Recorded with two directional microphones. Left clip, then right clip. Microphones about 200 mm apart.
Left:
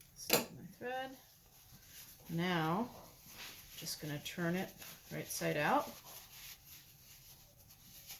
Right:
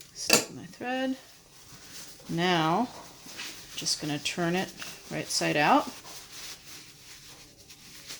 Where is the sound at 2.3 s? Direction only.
45° right (ahead or behind).